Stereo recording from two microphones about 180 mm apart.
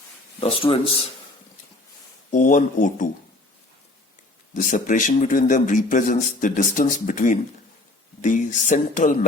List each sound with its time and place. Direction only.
0.3 s speech: 30° left (ahead or behind)
2.3 s a man's voice: 45° left (ahead or behind)
4.5 s a man's voice: 45° left (ahead or behind)